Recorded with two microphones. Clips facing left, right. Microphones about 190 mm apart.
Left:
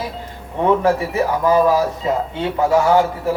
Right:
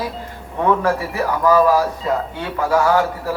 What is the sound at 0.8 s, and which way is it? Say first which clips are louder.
A man's voice: left 3 dB; 20° left (ahead or behind).